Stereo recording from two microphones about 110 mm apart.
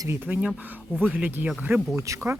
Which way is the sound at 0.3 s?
15° right (ahead or behind).